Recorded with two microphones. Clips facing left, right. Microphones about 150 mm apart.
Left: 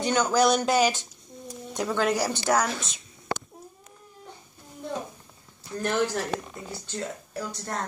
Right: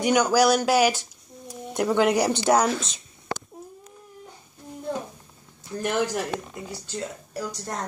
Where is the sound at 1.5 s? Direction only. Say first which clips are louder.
Right 5 dB; 10° right (ahead or behind).